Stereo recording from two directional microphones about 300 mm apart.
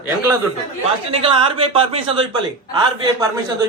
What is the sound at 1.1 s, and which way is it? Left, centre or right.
A woman's voice, centre.